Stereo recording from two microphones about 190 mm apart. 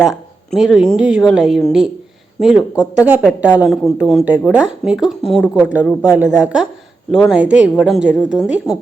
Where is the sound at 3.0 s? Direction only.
5° right (ahead or behind).